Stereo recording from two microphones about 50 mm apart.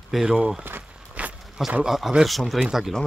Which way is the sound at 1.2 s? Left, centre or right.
Right.